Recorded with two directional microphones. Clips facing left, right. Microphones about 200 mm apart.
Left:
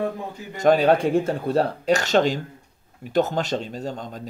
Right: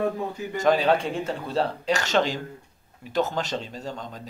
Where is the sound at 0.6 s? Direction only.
45° left (ahead or behind).